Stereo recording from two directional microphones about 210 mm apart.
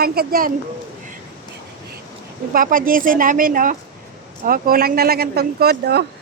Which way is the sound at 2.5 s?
40° right (ahead or behind).